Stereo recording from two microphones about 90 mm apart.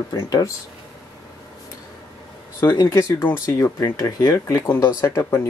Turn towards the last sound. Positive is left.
turn(degrees=30)  # may be behind; listen again after turning